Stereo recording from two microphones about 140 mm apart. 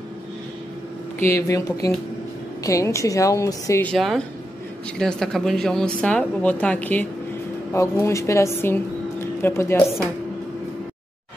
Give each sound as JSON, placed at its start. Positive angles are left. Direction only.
{"t": 1.2, "sound": "a woman's voice", "side_deg": 20}
{"t": 3.8, "sound": "speech", "side_deg": 5}
{"t": 7.7, "sound": "a woman's voice", "side_deg": 20}